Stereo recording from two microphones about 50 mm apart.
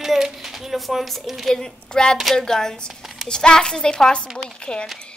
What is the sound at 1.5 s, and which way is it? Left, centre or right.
A child's voice, centre.